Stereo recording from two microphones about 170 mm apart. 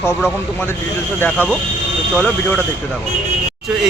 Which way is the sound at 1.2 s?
10° left (ahead or behind).